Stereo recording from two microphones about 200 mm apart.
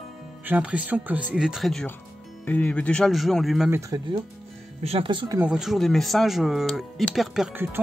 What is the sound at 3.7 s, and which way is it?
Speech, 15° right (ahead or behind).